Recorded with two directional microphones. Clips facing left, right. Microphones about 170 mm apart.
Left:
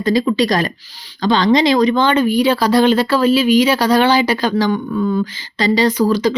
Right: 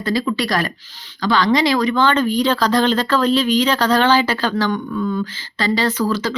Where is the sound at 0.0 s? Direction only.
20° left (ahead or behind).